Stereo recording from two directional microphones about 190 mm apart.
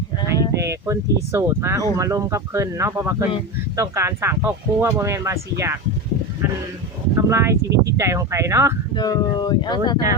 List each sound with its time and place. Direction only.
0.2 s sheep: 25° left (ahead or behind)
0.6 s speech: 15° right (ahead or behind)
7.2 s speech: 15° right (ahead or behind)
9.0 s speech: 20° left (ahead or behind)